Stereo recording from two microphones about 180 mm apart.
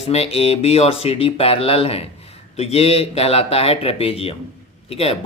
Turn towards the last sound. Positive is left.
turn(degrees=35)  # may be behind; listen again after turning